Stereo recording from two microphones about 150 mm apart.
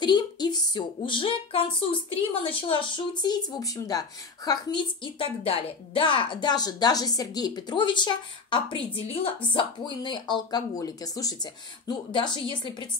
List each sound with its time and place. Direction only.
0.0 s a woman's voice: 30° left (ahead or behind)